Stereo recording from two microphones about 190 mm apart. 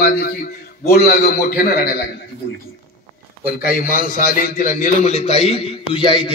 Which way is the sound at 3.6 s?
45° left (ahead or behind).